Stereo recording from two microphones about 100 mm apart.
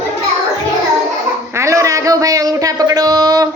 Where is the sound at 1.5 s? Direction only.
30° right (ahead or behind).